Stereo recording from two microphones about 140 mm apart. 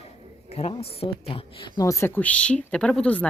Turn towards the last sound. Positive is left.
turn(degrees=10)  # may be behind; listen again after turning